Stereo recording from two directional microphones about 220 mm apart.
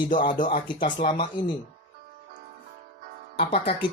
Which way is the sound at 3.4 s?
25° left (ahead or behind).